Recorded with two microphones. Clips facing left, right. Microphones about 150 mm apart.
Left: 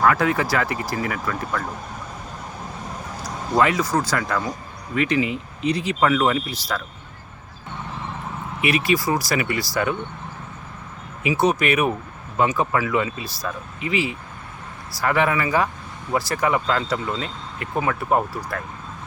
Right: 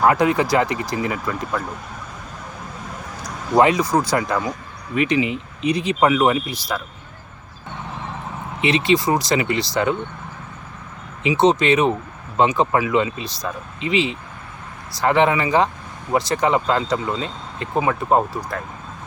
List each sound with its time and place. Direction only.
0.0 s speech: 20° right (ahead or behind)
3.5 s speech: 20° right (ahead or behind)
8.6 s speech: 25° right (ahead or behind)
11.2 s speech: 20° right (ahead or behind)